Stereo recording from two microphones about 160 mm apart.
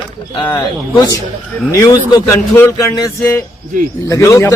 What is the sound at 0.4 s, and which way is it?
A man's voice, 25° left (ahead or behind).